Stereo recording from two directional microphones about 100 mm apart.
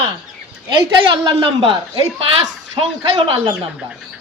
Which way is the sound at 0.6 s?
45° right (ahead or behind).